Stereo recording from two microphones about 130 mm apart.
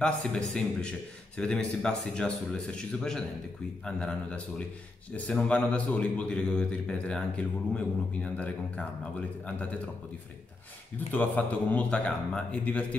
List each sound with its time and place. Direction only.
0.0 s a man's voice: 5° left (ahead or behind)
11.1 s a man's voice: 10° left (ahead or behind)